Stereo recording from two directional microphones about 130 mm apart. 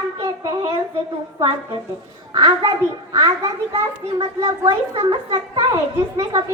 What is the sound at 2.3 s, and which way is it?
A child's voice, 35° right (ahead or behind).